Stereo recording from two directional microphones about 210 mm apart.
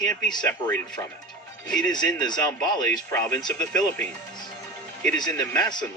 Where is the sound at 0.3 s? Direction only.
15° left (ahead or behind).